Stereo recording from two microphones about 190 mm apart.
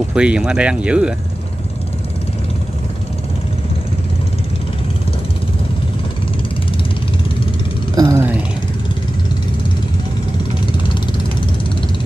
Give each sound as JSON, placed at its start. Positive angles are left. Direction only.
{"t": 0.1, "sound": "speech", "side_deg": -5}
{"t": 7.9, "sound": "music", "side_deg": -20}